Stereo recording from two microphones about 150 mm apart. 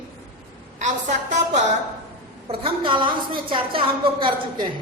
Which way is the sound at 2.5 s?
35° right (ahead or behind).